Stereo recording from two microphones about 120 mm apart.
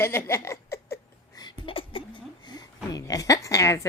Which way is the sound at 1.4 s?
50° left (ahead or behind).